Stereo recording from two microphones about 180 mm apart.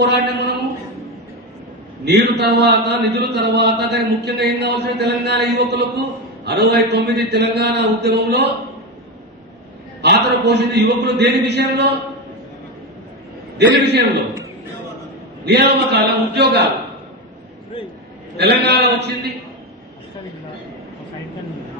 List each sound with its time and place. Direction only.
0.0 s a man's voice: 70° right (ahead or behind)
2.0 s a man's voice: 65° right (ahead or behind)
10.0 s a man's voice: 65° right (ahead or behind)
13.6 s a man's voice: 65° right (ahead or behind)
15.4 s a man's voice: 65° right (ahead or behind)
18.3 s a man's voice: 65° right (ahead or behind)